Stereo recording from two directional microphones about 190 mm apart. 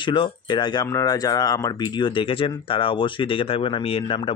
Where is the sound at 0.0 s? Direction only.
25° left (ahead or behind).